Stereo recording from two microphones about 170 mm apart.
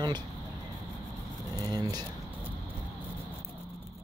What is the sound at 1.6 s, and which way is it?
Speech, 20° right (ahead or behind).